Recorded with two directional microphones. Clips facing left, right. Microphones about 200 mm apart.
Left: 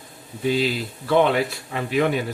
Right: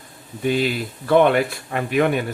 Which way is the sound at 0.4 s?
55° right (ahead or behind).